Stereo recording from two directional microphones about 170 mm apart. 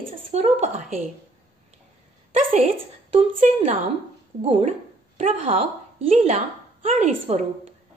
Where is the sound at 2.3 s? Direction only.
40° right (ahead or behind).